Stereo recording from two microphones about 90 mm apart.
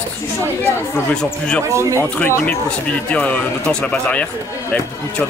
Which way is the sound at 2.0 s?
20° left (ahead or behind).